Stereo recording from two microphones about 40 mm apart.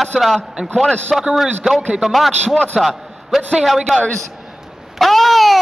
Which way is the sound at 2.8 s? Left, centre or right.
Centre.